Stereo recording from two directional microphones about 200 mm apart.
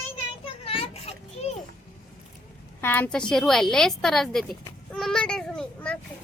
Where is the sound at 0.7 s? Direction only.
30° left (ahead or behind).